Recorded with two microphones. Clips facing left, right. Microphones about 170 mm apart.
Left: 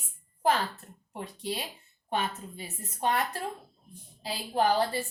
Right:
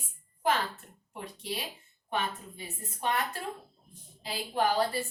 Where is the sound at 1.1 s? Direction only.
35° left (ahead or behind).